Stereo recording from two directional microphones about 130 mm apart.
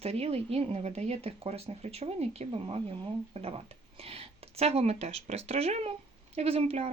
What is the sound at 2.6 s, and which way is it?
Speech, 40° right (ahead or behind).